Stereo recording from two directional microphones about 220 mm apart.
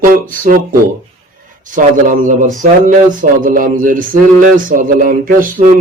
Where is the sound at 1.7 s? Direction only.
35° right (ahead or behind).